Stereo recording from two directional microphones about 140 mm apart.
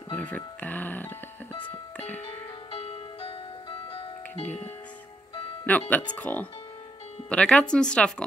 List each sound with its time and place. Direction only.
0.1 s speech: 10° left (ahead or behind)
2.0 s music: 10° left (ahead or behind)
2.7 s music: 40° left (ahead or behind)
5.7 s speech: 10° left (ahead or behind)